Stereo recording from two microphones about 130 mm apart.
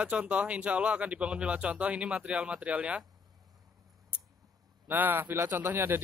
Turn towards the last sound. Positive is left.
turn(degrees=-15)  # may be behind; listen again after turning